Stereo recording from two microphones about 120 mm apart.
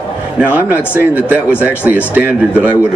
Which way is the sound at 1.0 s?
15° right (ahead or behind).